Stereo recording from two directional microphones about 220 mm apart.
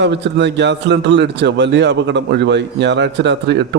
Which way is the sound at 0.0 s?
50° right (ahead or behind).